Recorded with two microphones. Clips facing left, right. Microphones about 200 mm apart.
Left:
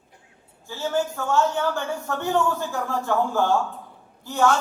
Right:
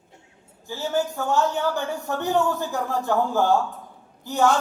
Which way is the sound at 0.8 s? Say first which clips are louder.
Even; 15° right (ahead or behind).